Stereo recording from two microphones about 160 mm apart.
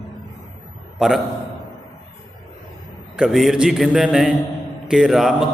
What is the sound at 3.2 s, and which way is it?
A man's voice, centre (ahead or behind).